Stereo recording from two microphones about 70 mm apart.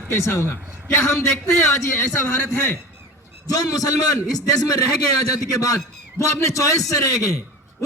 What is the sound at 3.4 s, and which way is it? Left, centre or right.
A man's voice, left.